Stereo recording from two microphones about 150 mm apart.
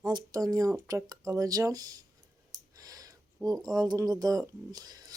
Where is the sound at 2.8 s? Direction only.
25° right (ahead or behind).